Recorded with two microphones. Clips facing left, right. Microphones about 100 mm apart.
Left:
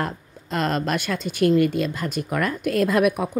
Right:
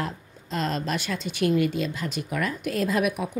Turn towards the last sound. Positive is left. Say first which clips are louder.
# left 5 dB
turn(degrees=55)  # may be behind; listen again after turning